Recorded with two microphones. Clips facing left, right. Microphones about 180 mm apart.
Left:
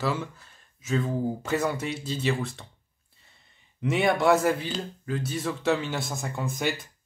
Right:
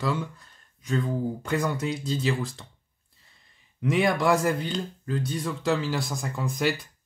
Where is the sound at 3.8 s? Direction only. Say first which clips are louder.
Even; centre (ahead or behind).